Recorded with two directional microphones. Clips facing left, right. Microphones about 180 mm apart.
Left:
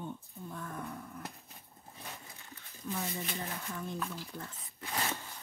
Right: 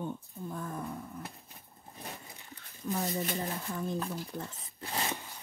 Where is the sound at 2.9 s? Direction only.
40° right (ahead or behind).